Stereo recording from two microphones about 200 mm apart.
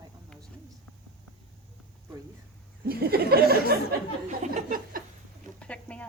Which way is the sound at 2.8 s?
50° right (ahead or behind).